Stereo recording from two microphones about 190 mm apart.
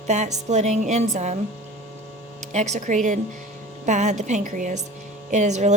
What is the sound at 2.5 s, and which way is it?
Speech, 40° right (ahead or behind).